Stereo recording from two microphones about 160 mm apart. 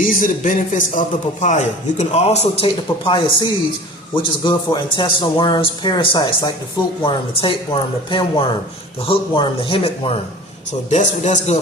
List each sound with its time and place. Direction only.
0.0 s a man's voice: 55° left (ahead or behind); by 10.2 s 35° left (ahead or behind)
10.7 s a man's voice: 50° left (ahead or behind)